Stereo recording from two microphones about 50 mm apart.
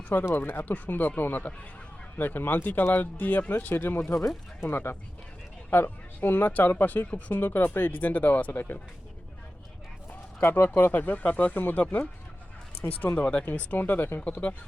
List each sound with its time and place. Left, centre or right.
0.1 s speech: left
7.9 s speech: left
8.5 s speech: left
10.1 s speech: left
12.8 s speech: left
13.1 s speech: left
13.7 s speech: left
14.2 s speech: left